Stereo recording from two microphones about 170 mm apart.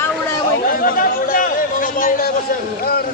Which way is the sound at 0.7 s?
55° left (ahead or behind).